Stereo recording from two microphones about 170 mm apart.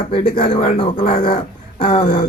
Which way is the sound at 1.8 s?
35° left (ahead or behind).